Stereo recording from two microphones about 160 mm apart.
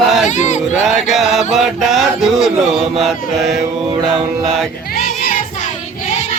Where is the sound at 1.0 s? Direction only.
Centre (ahead or behind).